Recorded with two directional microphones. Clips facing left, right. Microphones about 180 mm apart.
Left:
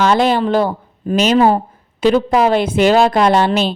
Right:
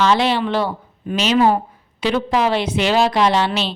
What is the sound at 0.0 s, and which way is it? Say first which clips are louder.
Speech: left 3 dB; 45° left (ahead or behind).